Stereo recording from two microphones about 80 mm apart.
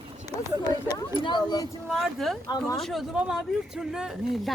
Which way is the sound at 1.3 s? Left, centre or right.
Left.